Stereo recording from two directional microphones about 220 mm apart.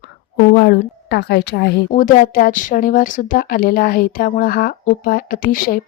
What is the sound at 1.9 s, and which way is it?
Speech, 35° left (ahead or behind).